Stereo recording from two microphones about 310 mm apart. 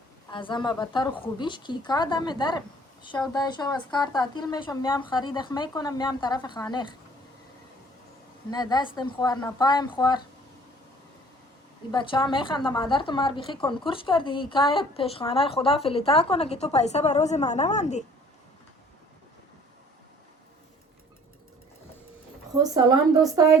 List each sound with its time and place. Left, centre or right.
0.3 s a woman's voice: centre
8.4 s a woman's voice: centre
11.9 s a woman's voice: centre
22.6 s a woman's voice: centre